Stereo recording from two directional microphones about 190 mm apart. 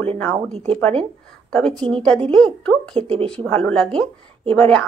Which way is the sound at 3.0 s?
30° right (ahead or behind).